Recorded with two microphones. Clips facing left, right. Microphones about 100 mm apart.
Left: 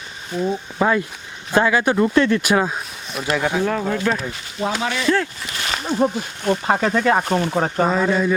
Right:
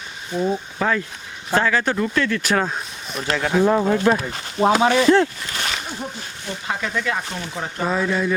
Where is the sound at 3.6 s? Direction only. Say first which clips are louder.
Right 4 dB; 20° right (ahead or behind).